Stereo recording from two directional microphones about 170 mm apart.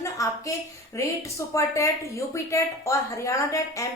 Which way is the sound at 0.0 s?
20° left (ahead or behind).